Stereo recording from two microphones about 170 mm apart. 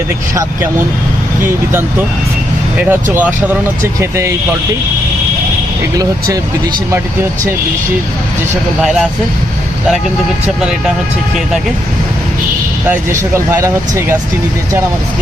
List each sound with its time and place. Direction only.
1.4 s speech: 15° right (ahead or behind)
8.8 s speech: 5° right (ahead or behind)
10.6 s speech: 5° right (ahead or behind)
12.9 s speech: 15° right (ahead or behind)